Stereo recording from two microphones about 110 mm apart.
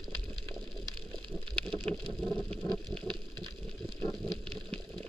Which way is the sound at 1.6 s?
10° left (ahead or behind).